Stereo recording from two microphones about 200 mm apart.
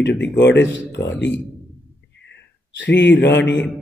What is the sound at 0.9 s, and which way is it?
Speech, 15° left (ahead or behind).